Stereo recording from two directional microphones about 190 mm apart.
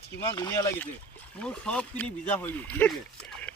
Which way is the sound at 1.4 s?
5° left (ahead or behind).